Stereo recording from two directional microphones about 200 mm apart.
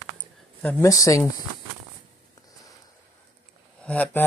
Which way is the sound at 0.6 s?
10° left (ahead or behind).